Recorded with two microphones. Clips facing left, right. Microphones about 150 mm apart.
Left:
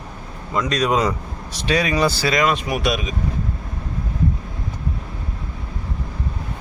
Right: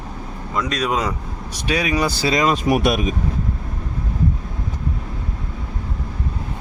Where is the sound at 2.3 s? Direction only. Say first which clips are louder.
Right 2 dB; 35° right (ahead or behind); by 3.0 s 50° right (ahead or behind).